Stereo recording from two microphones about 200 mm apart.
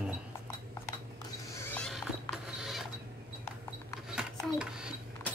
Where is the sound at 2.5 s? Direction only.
Centre (ahead or behind).